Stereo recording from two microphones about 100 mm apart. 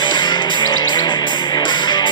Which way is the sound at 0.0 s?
50° left (ahead or behind).